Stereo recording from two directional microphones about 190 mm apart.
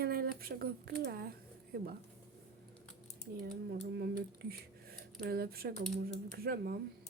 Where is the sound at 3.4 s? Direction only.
55° right (ahead or behind).